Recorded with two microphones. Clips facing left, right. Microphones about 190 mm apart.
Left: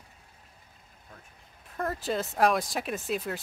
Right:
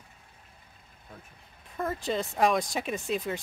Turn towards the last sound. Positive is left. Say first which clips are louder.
# right 1 dB
turn(degrees=0)  # may be behind; listen again after turning